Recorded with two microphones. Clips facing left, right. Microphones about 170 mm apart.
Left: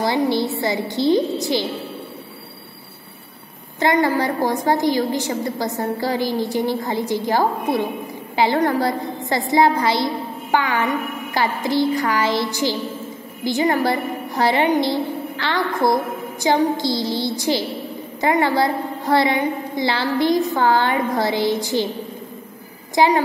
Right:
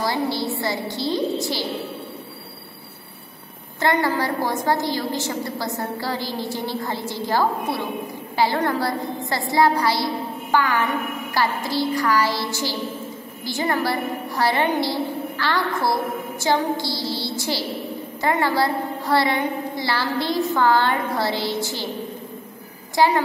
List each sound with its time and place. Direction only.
0.0 s a woman's voice: 20° left (ahead or behind)
3.8 s a woman's voice: 15° left (ahead or behind)
22.9 s a woman's voice: 15° left (ahead or behind)